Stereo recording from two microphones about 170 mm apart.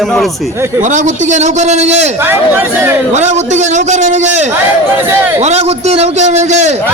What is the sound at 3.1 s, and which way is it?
A man's voice, 40° right (ahead or behind).